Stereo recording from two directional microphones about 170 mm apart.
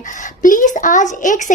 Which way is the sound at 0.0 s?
50° left (ahead or behind).